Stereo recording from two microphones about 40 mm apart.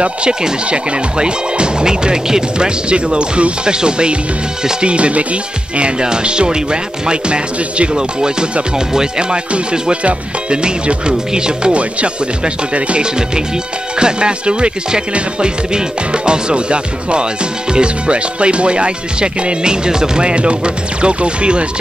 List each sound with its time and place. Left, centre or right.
0.0 s speech: right
9.5 s speech: right
12.7 s speech: right